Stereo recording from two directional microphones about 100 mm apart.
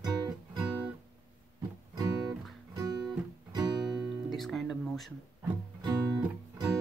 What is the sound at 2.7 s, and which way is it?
Music, 40° right (ahead or behind).